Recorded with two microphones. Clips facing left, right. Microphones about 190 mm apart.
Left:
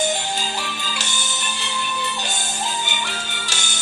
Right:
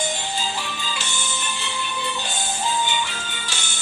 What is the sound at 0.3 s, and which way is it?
Music, 75° left (ahead or behind).